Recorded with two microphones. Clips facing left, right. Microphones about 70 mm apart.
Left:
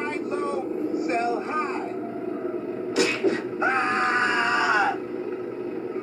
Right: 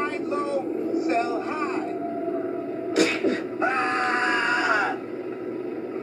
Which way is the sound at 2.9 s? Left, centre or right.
Right.